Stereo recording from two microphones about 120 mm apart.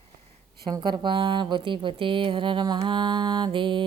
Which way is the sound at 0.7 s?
35° right (ahead or behind).